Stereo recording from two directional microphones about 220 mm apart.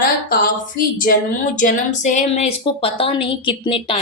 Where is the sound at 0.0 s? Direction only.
40° left (ahead or behind).